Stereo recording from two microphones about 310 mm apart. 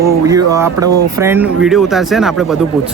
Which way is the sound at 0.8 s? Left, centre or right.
Right.